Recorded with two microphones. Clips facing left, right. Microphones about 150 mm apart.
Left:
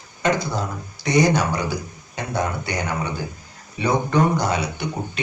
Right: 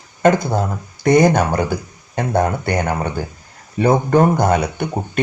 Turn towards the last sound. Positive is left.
turn(degrees=-50)  # may be behind; listen again after turning